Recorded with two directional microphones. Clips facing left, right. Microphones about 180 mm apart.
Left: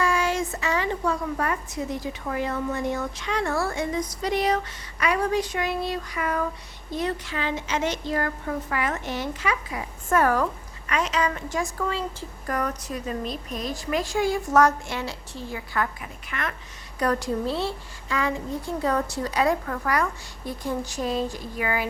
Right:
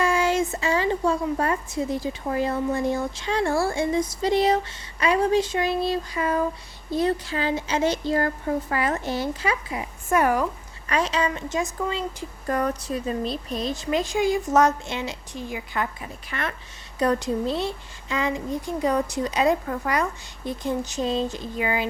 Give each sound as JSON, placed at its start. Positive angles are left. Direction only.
{"t": 0.0, "sound": "a woman's voice", "side_deg": -25}
{"t": 10.1, "sound": "speech", "side_deg": -15}
{"t": 10.8, "sound": "a woman's voice", "side_deg": -35}
{"t": 12.5, "sound": "a woman's voice", "side_deg": -30}
{"t": 16.3, "sound": "a woman's voice", "side_deg": -30}